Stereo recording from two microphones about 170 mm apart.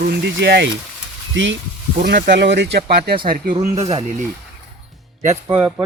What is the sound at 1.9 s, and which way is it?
Speech, 80° right.